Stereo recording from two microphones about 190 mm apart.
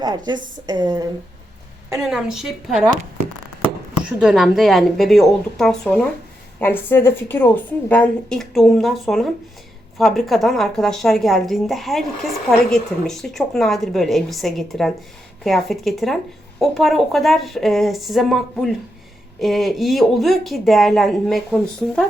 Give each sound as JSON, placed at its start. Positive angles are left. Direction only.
{"t": 0.7, "sound": "speech", "side_deg": -20}
{"t": 2.0, "sound": "a woman's voice", "side_deg": -5}
{"t": 4.2, "sound": "a woman's voice", "side_deg": -5}